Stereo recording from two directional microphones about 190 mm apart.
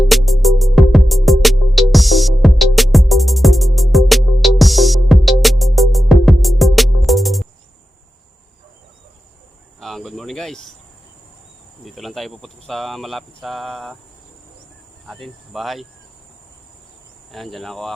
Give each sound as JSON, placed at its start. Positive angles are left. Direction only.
{"t": 0.1, "sound": "music", "side_deg": 0}
{"t": 9.8, "sound": "cricket", "side_deg": 0}
{"t": 11.9, "sound": "speech", "side_deg": 0}
{"t": 15.0, "sound": "cricket", "side_deg": 0}
{"t": 17.3, "sound": "cricket", "side_deg": 0}